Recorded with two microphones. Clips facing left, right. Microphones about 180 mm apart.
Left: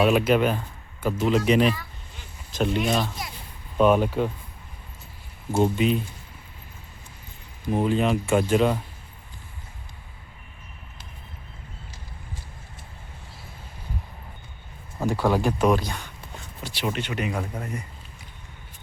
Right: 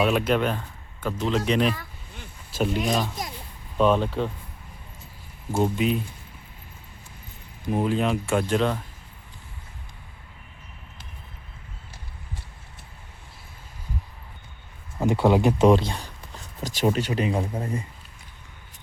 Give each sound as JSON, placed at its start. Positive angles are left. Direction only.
{"t": 0.0, "sound": "speech", "side_deg": 5}
{"t": 1.7, "sound": "a sound", "side_deg": -55}
{"t": 2.5, "sound": "speech", "side_deg": -5}
{"t": 3.2, "sound": "a child's voice", "side_deg": -45}
{"t": 3.8, "sound": "speech", "side_deg": 10}
{"t": 5.5, "sound": "speech", "side_deg": 5}
{"t": 7.7, "sound": "speech", "side_deg": 0}
{"t": 14.9, "sound": "speech", "side_deg": -20}